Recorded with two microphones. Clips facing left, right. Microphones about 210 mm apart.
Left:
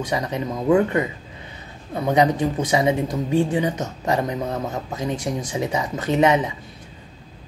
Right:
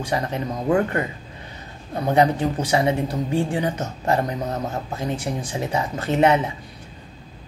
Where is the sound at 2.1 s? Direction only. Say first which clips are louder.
Even; 20° left (ahead or behind).